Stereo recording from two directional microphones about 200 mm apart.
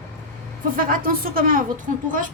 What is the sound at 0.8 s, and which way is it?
Speech, 45° right (ahead or behind).